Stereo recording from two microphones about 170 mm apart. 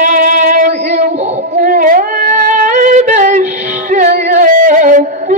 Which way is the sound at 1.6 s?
50° right (ahead or behind).